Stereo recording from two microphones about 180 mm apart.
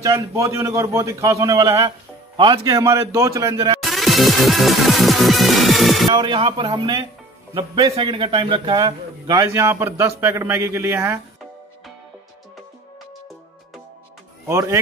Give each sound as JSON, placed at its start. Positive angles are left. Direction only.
{"t": 0.0, "sound": "a man's voice", "side_deg": -15}
{"t": 3.8, "sound": "music", "side_deg": 0}
{"t": 6.0, "sound": "a man's voice", "side_deg": -25}
{"t": 14.5, "sound": "a man's voice", "side_deg": -15}